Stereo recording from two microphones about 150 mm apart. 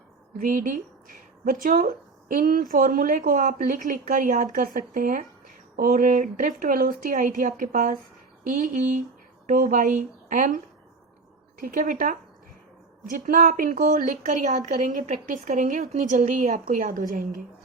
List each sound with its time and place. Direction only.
0.3 s a woman's voice: 60° right (ahead or behind)
11.6 s a woman's voice: 60° right (ahead or behind)